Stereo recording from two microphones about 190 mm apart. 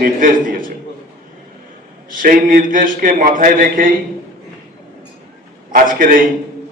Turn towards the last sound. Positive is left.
turn(degrees=-45)  # may be behind; listen again after turning